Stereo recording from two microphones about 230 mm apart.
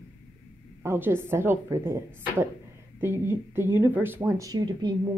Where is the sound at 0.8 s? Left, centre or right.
Centre.